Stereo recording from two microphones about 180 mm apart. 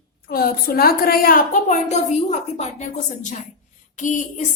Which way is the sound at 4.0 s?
45° left (ahead or behind).